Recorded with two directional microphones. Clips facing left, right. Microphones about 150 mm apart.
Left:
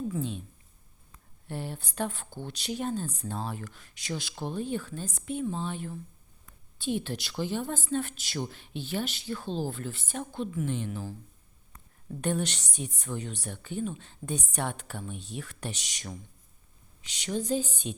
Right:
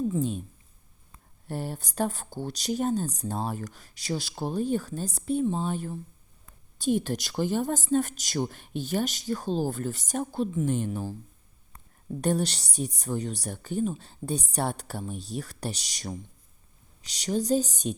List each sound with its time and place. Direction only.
0.2 s a woman's voice: 45° right (ahead or behind)
1.5 s a woman's voice: 40° right (ahead or behind)
12.2 s speech: 35° right (ahead or behind)